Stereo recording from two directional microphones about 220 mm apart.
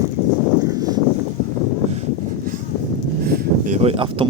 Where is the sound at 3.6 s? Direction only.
30° right (ahead or behind).